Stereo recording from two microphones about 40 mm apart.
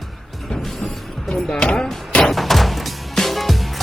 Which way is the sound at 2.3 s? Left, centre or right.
Centre.